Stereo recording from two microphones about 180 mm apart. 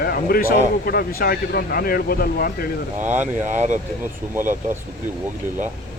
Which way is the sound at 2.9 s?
40° right (ahead or behind).